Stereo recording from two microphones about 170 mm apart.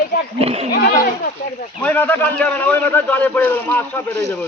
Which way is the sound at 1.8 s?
10° left (ahead or behind).